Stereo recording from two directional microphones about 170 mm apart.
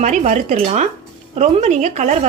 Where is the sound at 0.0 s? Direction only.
45° right (ahead or behind).